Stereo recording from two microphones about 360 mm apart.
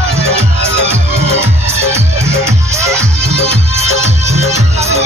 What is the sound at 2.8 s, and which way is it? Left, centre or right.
Music, centre.